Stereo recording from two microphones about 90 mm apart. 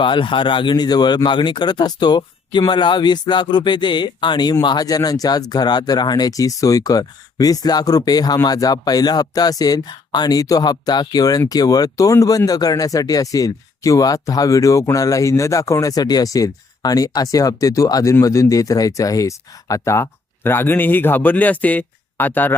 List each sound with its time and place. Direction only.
0.0 s speech: 65° left (ahead or behind); by 22.5 s 20° left (ahead or behind)